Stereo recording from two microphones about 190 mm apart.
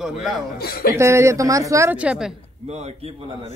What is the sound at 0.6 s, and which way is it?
Speech, 55° left (ahead or behind).